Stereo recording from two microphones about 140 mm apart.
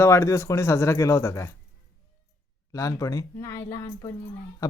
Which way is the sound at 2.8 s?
25° left (ahead or behind).